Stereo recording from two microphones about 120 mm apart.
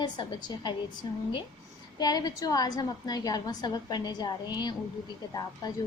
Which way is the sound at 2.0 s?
35° left (ahead or behind).